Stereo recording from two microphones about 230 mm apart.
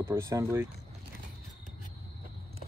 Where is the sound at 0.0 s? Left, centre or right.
Centre.